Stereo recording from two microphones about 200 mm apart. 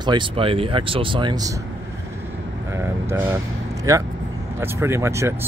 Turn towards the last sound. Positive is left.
turn(degrees=-15)  # may be behind; listen again after turning